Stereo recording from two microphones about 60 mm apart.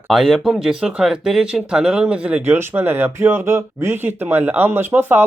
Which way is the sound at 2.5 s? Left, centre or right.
Right.